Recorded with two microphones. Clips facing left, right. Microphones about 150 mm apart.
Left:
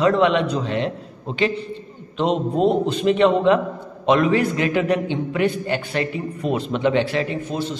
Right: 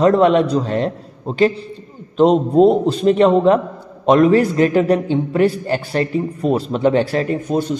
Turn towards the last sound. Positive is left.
turn(degrees=-45)  # may be behind; listen again after turning